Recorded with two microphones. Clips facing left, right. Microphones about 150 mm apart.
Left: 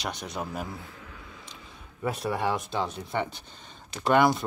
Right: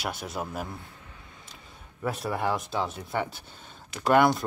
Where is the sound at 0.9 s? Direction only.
90° left.